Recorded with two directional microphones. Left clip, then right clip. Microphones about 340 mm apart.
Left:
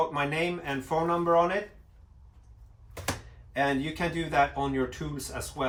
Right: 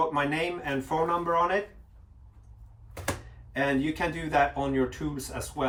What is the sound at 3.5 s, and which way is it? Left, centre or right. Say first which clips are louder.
Speech: even; centre.